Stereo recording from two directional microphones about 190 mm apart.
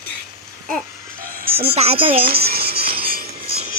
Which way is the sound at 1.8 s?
30° right (ahead or behind).